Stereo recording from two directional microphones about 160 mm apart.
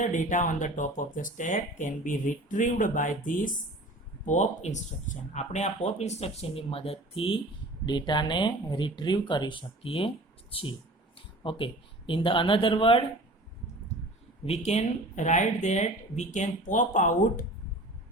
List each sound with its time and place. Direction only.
0.0 s speech: 50° left (ahead or behind); by 10.1 s 35° left (ahead or behind)
11.4 s speech: 30° left (ahead or behind)
14.4 s speech: 40° left (ahead or behind)